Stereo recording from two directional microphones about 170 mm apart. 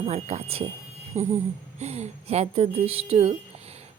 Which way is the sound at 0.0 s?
40° right (ahead or behind).